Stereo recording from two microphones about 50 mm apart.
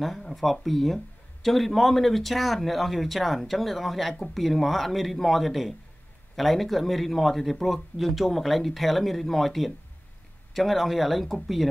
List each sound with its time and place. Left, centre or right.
0.0 s speech: centre